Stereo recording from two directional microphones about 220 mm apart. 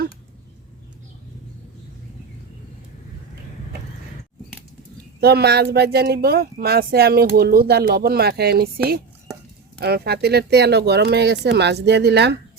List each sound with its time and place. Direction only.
5.2 s speech: 45° right (ahead or behind)
9.8 s speech: 45° right (ahead or behind)